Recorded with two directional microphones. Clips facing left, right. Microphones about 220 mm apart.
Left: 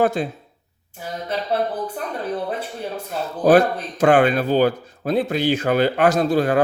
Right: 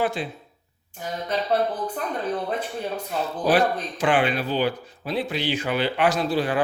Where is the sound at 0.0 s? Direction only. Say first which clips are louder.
Left 6 dB; 45° left (ahead or behind).